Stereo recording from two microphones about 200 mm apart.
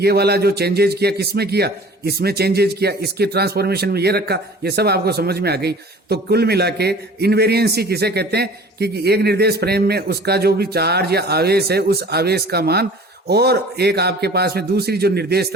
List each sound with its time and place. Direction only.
0.0 s speech: 55° right (ahead or behind)